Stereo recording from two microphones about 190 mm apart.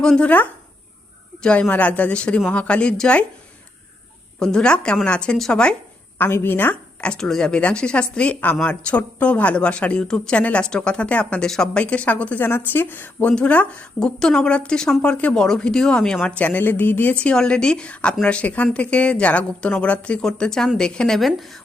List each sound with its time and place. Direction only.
0.0 s a woman's voice: 5° left (ahead or behind)
4.4 s a woman's voice: 5° left (ahead or behind)